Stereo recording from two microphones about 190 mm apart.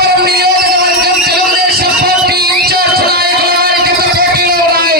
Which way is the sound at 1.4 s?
55° right (ahead or behind).